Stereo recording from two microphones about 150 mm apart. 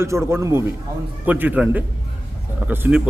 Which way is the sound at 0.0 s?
15° right (ahead or behind).